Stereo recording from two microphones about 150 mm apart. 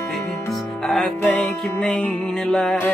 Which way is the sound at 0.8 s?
5° left (ahead or behind).